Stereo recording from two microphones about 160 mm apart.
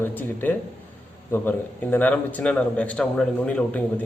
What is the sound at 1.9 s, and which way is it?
A man's voice, 10° left (ahead or behind).